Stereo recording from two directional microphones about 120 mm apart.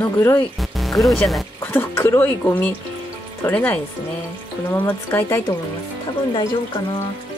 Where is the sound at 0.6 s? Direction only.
Centre (ahead or behind).